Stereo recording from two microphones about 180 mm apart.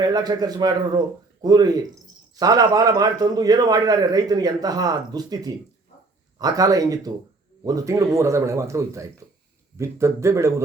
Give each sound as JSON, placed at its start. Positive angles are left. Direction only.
{"t": 0.0, "sound": "a man's voice", "side_deg": -20}